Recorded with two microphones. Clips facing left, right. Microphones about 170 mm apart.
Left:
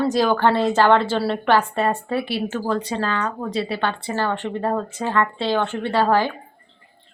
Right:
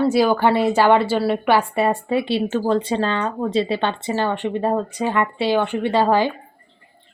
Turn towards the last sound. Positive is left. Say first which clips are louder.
# right 2 dB
turn(degrees=-15)  # may be behind; listen again after turning